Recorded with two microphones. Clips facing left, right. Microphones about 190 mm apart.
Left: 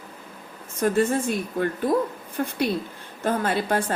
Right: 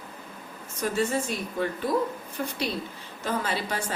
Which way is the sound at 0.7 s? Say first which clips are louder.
Left 5 dB; 55° left (ahead or behind).